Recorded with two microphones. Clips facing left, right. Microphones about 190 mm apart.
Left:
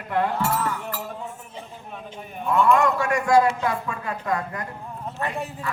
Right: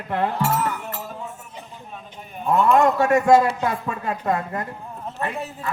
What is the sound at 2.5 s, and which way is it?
A man's voice, 25° right (ahead or behind).